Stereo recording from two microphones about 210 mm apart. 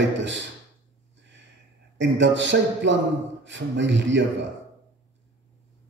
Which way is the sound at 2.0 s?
60° right (ahead or behind).